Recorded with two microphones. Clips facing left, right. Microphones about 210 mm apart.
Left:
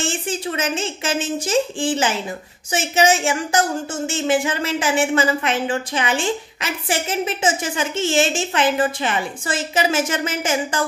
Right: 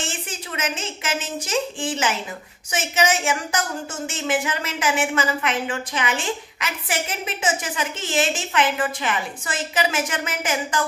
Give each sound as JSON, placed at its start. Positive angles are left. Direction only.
{"t": 0.0, "sound": "a woman's voice", "side_deg": 30}